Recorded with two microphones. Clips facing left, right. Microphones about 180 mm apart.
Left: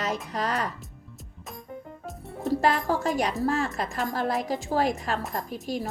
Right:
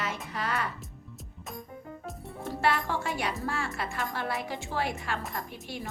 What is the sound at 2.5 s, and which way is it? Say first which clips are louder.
Speech: left 5 dB; 40° left (ahead or behind).